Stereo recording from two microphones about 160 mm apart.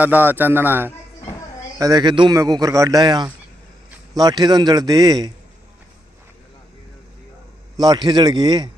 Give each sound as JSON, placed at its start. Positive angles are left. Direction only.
{"t": 0.0, "sound": "a man's voice", "side_deg": -10}
{"t": 7.7, "sound": "a man's voice", "side_deg": -25}